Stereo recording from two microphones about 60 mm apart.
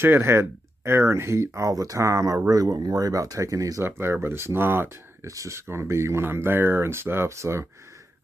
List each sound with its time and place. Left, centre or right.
0.0 s speech: right
3.8 s speech: right
5.2 s speech: right
5.7 s speech: right